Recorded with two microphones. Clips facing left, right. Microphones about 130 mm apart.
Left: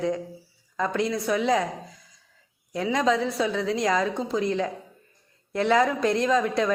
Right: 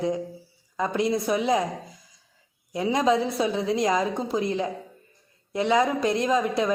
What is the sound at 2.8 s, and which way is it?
A woman's voice, 20° right (ahead or behind).